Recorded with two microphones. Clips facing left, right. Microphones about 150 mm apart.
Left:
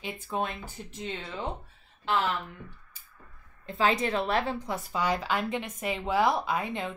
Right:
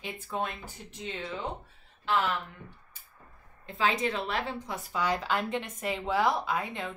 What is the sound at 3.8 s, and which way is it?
Speech, 45° left (ahead or behind).